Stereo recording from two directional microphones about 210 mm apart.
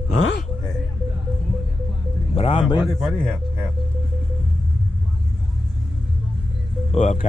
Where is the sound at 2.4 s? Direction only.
25° left (ahead or behind).